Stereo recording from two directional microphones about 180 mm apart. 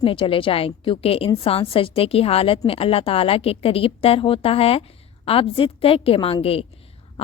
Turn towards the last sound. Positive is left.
turn(degrees=30)  # may be behind; listen again after turning